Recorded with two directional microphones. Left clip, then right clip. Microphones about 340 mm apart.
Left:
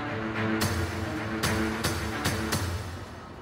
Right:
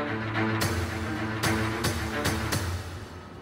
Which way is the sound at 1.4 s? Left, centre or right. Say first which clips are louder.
Right 1 dB; centre.